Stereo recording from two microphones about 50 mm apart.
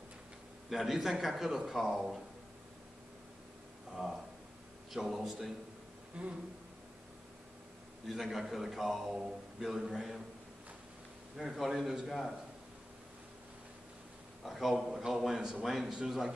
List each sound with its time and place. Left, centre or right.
0.7 s a man's voice: centre
4.0 s a man's voice: centre
6.2 s speech: right
8.1 s a man's voice: centre
11.3 s a man's voice: centre
14.4 s a man's voice: centre